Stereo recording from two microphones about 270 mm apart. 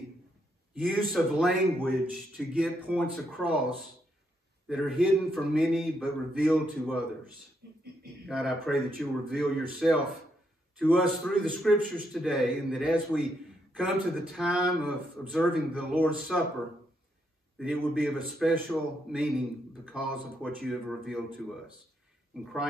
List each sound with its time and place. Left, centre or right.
0.7 s a man's voice: centre
7.6 s a sound: right
8.3 s a man's voice: centre
17.6 s a man's voice: centre
22.4 s a man's voice: centre